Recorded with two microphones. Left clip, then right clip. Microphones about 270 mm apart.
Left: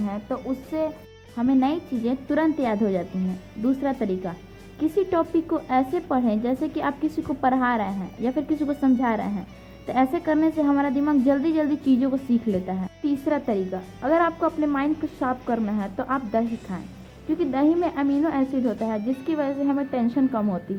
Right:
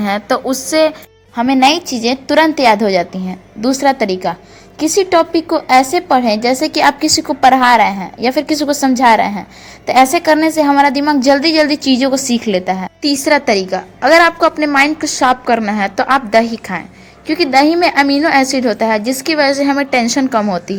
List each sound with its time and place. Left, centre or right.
0.0 s a woman's voice: right
12.5 s a woman's voice: right